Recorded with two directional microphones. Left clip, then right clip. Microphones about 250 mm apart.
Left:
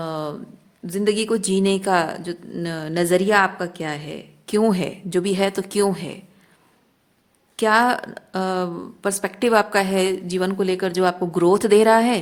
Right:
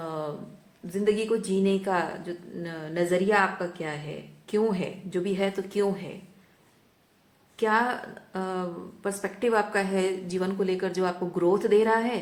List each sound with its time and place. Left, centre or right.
0.0 s a sound: left
0.9 s speech: left
7.5 s a woman's voice: left